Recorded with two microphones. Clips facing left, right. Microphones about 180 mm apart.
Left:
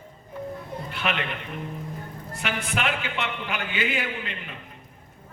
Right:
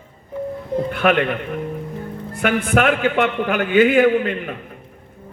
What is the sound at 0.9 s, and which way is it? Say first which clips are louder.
A man's voice: right 11 dB; 50° right (ahead or behind).